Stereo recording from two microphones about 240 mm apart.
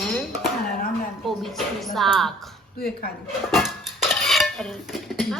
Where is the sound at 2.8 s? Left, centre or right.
Left.